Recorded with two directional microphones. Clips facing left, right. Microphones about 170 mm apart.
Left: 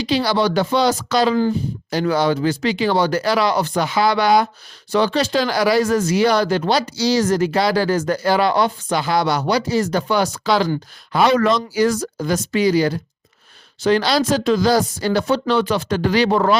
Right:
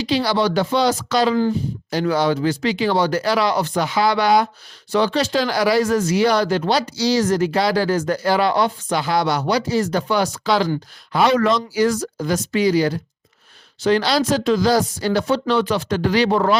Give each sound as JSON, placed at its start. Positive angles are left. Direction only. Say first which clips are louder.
{"t": 0.0, "sound": "speech", "louder": "left 1 dB", "side_deg": 45}